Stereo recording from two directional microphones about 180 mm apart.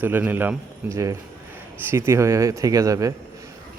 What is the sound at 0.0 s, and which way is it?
Speech, 10° right (ahead or behind).